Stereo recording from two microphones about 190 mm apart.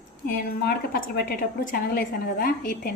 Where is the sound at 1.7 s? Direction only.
50° left (ahead or behind).